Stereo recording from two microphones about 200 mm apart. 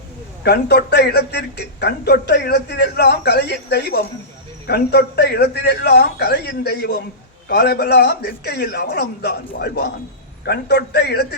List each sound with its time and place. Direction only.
0.4 s a man's voice: 55° left (ahead or behind)